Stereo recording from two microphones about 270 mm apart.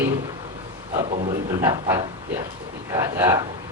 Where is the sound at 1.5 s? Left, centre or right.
Centre.